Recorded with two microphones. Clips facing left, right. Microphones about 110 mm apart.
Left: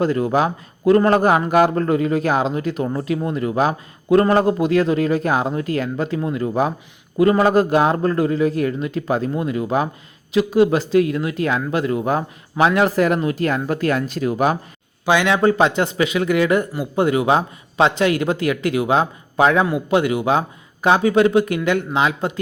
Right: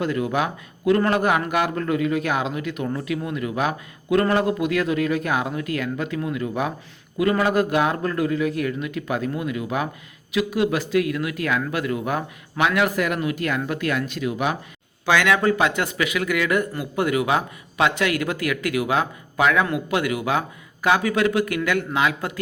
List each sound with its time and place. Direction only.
0.0 s a man's voice: 35° left (ahead or behind)
15.0 s a man's voice: 20° left (ahead or behind)